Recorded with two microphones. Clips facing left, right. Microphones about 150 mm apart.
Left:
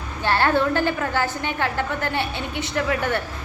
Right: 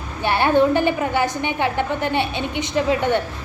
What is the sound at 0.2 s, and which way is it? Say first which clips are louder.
A woman's voice: right 3 dB; 15° right (ahead or behind).